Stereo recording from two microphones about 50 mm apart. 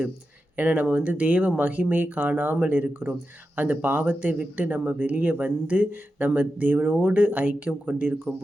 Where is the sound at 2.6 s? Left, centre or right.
Right.